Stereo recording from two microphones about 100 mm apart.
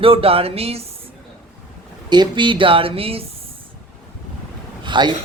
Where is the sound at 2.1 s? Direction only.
50° right (ahead or behind); by 3.2 s 75° right (ahead or behind).